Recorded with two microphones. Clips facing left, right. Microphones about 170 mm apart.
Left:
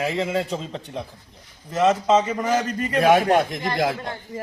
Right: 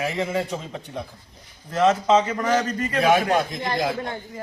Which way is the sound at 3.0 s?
55° left (ahead or behind).